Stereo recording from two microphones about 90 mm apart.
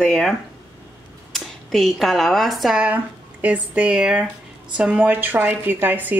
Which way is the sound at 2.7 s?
15° right (ahead or behind).